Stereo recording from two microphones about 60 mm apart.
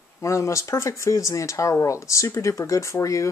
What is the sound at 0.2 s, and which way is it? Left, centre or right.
Speech, left.